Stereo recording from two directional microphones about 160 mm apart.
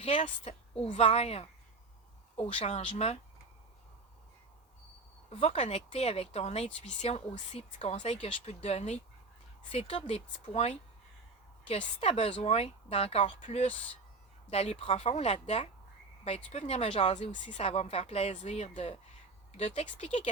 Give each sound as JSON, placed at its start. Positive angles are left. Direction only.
{"t": 0.0, "sound": "a woman's voice", "side_deg": 45}
{"t": 2.5, "sound": "speech", "side_deg": 35}
{"t": 5.3, "sound": "speech", "side_deg": 40}